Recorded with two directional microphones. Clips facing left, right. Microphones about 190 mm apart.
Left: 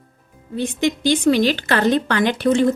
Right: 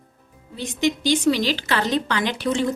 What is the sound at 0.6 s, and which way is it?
A woman's voice, 55° left (ahead or behind).